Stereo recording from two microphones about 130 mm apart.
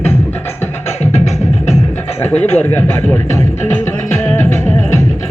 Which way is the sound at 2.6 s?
15° left (ahead or behind).